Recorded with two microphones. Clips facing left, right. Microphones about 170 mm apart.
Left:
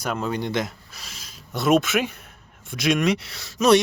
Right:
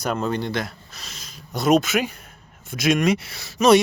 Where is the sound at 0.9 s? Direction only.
5° left (ahead or behind).